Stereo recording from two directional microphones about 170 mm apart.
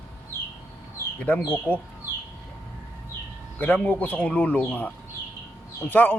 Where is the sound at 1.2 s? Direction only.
10° left (ahead or behind).